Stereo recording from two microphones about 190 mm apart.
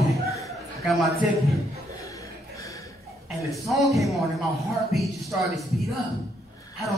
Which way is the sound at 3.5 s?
Centre (ahead or behind).